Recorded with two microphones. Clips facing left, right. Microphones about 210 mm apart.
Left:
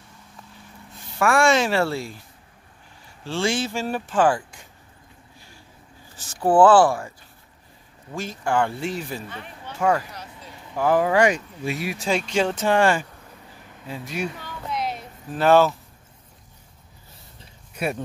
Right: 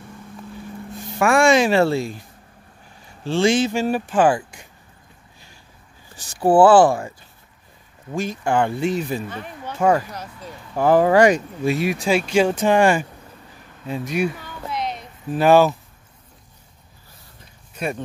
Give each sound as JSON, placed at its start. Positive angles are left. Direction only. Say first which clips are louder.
{"t": 1.1, "sound": "speech", "louder": "right 3 dB", "side_deg": -20}
{"t": 3.3, "sound": "speech", "louder": "right 7 dB", "side_deg": -20}
{"t": 6.1, "sound": "speech", "louder": "right 3 dB", "side_deg": -10}
{"t": 9.3, "sound": "speech", "louder": "right 6 dB", "side_deg": -40}
{"t": 9.8, "sound": "speech", "louder": "right 4 dB", "side_deg": -25}
{"t": 11.8, "sound": "speech", "louder": "right 2 dB", "side_deg": -20}
{"t": 14.3, "sound": "a sound", "louder": "right 1 dB", "side_deg": 0}
{"t": 15.3, "sound": "speech", "louder": "right 3 dB", "side_deg": -10}
{"t": 17.7, "sound": "speech", "louder": "even", "side_deg": 5}